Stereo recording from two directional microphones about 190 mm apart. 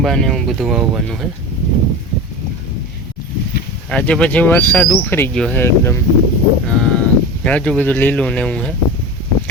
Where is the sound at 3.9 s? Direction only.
5° left (ahead or behind).